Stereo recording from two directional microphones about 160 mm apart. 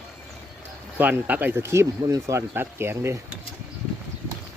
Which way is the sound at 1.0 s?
10° right (ahead or behind).